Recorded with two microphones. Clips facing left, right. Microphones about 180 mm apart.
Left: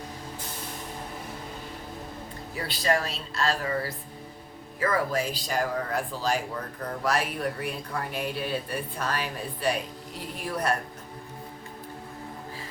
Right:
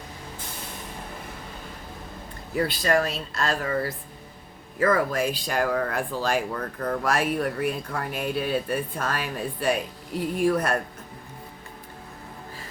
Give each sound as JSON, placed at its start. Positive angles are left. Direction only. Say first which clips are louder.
{"t": 2.6, "sound": "a woman's voice", "louder": "right 4 dB", "side_deg": -50}